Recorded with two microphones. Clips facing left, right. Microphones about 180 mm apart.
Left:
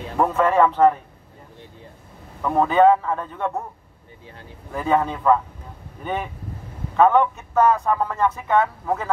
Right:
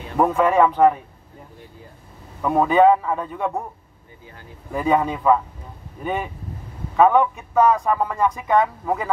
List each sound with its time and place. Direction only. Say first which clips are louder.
0.2 s speech: right 1 dB; 10° right (ahead or behind)
2.4 s speech: right 1 dB; 10° right (ahead or behind)
4.7 s speech: right 1 dB; 10° right (ahead or behind)
7.0 s speech: right 1 dB; 5° right (ahead or behind)